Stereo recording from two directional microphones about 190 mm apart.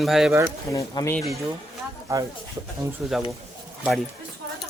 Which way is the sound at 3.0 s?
5° right (ahead or behind).